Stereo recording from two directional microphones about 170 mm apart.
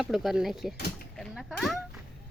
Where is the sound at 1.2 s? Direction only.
Centre (ahead or behind).